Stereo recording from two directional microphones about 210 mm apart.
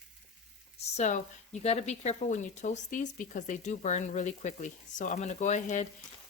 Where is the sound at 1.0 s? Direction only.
35° left (ahead or behind).